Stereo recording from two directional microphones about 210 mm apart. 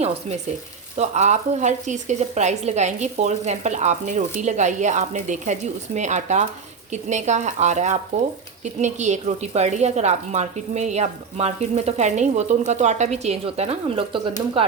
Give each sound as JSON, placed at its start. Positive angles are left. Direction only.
{"t": 0.9, "sound": "a woman's voice", "side_deg": -35}